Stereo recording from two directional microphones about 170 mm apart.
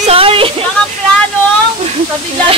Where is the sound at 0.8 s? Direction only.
5° left (ahead or behind).